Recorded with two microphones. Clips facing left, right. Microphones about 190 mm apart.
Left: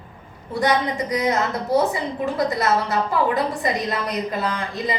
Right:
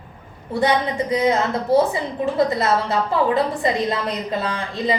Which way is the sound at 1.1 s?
25° right (ahead or behind).